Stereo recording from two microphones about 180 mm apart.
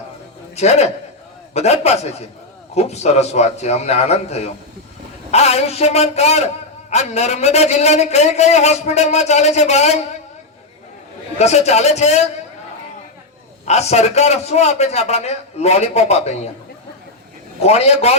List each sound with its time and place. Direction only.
0.5 s a man's voice: 35° left (ahead or behind)
11.3 s a man's voice: 40° left (ahead or behind)
13.7 s a man's voice: 35° left (ahead or behind)
17.6 s a man's voice: 35° left (ahead or behind)